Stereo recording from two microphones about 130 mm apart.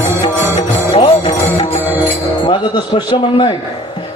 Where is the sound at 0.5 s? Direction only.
50° left (ahead or behind).